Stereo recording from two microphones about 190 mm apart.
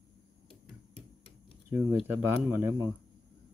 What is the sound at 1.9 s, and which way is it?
Speech, 10° right (ahead or behind).